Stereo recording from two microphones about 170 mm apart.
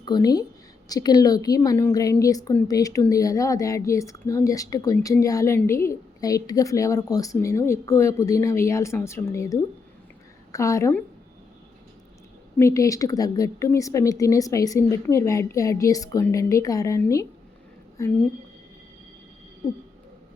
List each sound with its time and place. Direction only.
0.0 s a woman's voice: 25° left (ahead or behind)
12.5 s a woman's voice: 15° left (ahead or behind)